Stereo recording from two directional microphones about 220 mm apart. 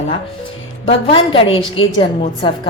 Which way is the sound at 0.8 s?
25° left (ahead or behind).